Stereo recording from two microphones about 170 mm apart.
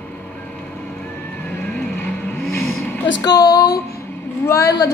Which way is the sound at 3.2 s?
25° left (ahead or behind).